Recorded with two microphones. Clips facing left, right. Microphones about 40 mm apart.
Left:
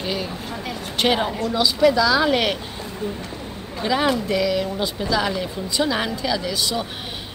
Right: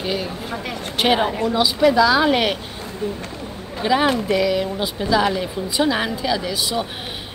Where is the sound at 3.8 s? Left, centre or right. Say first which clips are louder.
Right 2 dB; centre.